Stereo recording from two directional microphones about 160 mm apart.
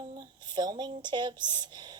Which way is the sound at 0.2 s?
25° right (ahead or behind).